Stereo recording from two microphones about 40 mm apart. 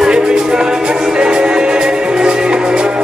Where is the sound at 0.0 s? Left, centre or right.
Centre.